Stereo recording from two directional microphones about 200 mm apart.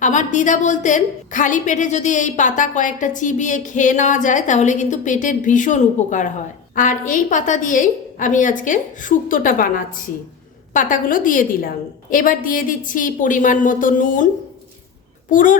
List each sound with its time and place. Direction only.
0.0 s a woman's voice: 40° left (ahead or behind)
15.3 s a woman's voice: 40° left (ahead or behind)